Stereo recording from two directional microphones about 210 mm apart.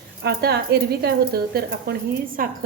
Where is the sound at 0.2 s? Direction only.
50° right (ahead or behind).